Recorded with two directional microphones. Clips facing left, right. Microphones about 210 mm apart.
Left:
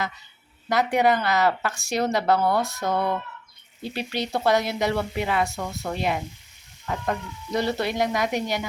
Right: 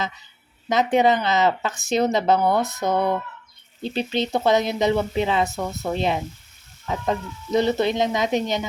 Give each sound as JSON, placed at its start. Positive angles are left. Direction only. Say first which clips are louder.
{"t": 0.7, "sound": "speech", "louder": "right 3 dB", "side_deg": -20}